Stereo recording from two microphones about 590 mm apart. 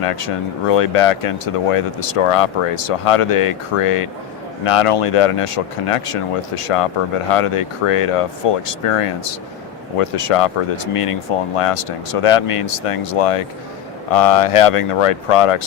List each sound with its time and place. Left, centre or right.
0.0 s speech: left